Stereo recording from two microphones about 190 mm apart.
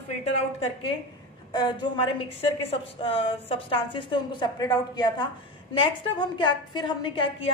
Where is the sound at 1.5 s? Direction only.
25° left (ahead or behind).